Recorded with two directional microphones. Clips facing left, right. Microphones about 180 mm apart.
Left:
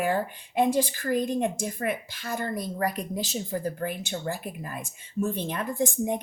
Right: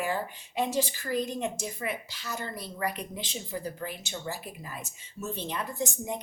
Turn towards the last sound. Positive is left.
turn(degrees=55)  # may be behind; listen again after turning